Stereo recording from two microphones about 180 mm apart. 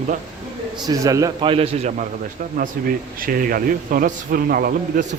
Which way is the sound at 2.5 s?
50° right (ahead or behind).